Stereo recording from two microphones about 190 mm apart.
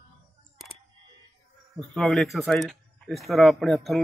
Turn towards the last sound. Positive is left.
turn(degrees=0)  # may be behind; listen again after turning